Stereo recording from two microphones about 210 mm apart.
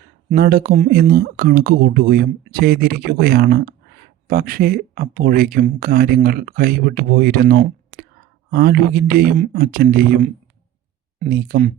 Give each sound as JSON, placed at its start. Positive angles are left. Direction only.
{"t": 0.3, "sound": "speech", "side_deg": -45}